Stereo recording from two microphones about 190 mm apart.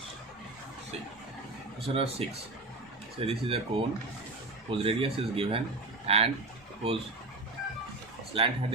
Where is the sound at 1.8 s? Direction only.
30° right (ahead or behind).